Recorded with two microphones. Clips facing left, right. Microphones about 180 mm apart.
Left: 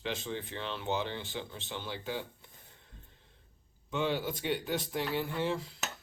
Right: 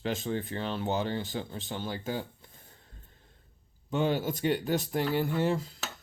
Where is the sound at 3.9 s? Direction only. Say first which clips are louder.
Right 4 dB; 45° right (ahead or behind).